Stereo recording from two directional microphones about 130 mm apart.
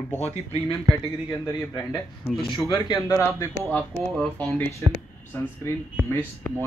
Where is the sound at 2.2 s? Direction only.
20° left (ahead or behind).